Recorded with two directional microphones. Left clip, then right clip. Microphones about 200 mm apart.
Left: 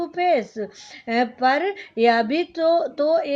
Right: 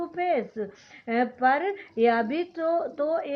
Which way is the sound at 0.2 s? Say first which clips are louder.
Left 6 dB; 45° left (ahead or behind).